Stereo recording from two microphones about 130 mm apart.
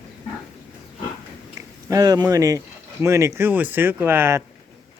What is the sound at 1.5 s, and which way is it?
Speech, 25° right (ahead or behind).